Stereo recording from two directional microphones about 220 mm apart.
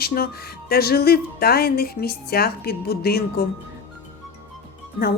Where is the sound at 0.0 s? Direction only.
45° left (ahead or behind).